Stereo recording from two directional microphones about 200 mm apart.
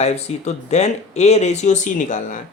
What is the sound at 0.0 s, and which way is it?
Speech, 35° left (ahead or behind).